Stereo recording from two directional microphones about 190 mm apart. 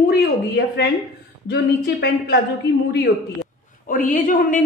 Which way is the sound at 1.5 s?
65° left (ahead or behind).